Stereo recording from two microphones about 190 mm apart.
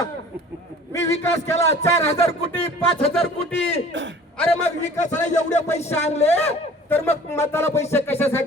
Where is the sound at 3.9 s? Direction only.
75° right (ahead or behind).